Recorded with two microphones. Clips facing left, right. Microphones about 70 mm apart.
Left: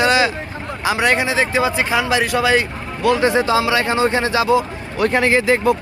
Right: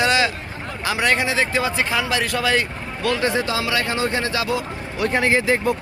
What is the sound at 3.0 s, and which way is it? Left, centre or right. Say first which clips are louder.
Speech: left 6 dB; left.